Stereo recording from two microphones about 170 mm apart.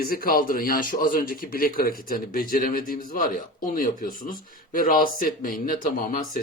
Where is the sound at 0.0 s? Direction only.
60° left (ahead or behind).